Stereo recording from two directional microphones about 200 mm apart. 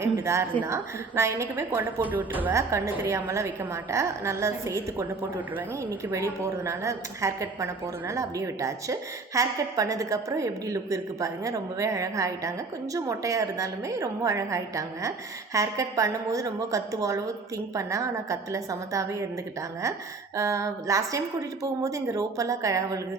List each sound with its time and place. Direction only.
0.0 s a woman's voice: 15° right (ahead or behind)
6.7 s a woman's voice: 15° right (ahead or behind)
20.3 s a woman's voice: 15° right (ahead or behind)